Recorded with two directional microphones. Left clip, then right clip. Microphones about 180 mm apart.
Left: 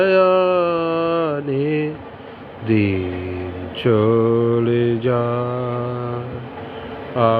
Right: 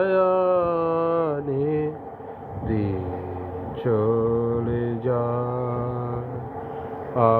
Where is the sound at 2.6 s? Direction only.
35° left (ahead or behind).